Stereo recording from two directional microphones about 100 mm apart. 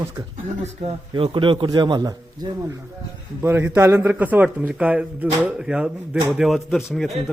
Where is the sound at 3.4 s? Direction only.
25° right (ahead or behind).